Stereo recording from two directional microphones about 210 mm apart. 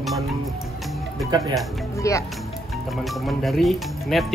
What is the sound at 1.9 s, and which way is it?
Speech, 15° left (ahead or behind).